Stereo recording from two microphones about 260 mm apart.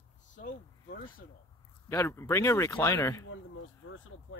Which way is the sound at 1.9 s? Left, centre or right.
Centre.